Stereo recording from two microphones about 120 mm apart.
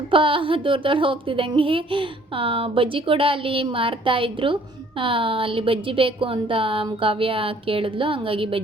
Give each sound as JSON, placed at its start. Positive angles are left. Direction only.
{"t": 0.1, "sound": "speech", "side_deg": -45}